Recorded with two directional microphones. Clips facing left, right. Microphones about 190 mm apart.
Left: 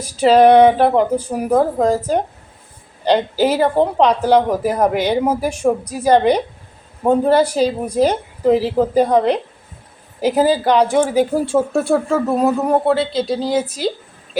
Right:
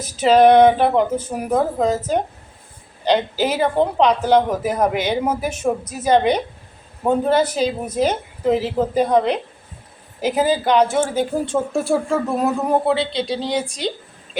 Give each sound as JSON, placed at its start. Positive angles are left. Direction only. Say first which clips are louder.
{"t": 0.0, "sound": "speech", "louder": "left 2 dB", "side_deg": 10}